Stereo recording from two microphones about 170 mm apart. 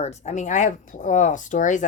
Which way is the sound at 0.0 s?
40° left (ahead or behind).